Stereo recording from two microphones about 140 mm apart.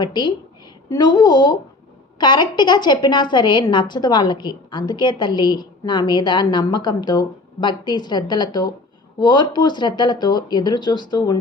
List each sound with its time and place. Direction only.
0.0 s a woman's voice: 30° left (ahead or behind)